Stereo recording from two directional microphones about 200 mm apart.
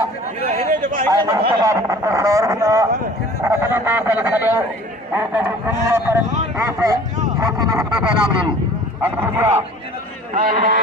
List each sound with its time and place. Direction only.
0.4 s chatter: 40° right (ahead or behind)
1.1 s speech: 15° right (ahead or behind)
6.6 s a sound: 15° right (ahead or behind)
7.8 s speech: 5° right (ahead or behind)
10.3 s speech: 45° right (ahead or behind)